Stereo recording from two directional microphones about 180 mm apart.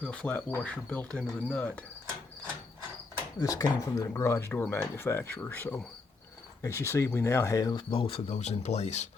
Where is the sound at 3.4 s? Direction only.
20° left (ahead or behind).